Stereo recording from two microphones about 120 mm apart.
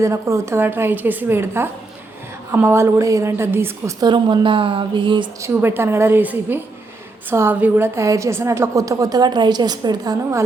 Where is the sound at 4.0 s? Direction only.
40° right (ahead or behind).